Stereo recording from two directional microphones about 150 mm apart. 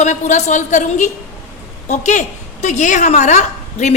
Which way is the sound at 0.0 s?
50° left (ahead or behind).